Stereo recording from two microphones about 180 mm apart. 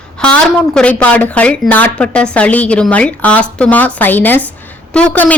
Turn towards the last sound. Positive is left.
turn(degrees=10)  # may be behind; listen again after turning